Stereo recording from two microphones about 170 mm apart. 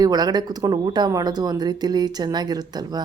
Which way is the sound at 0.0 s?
25° right (ahead or behind).